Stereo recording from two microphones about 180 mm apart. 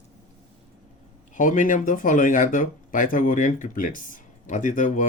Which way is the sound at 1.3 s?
45° left (ahead or behind).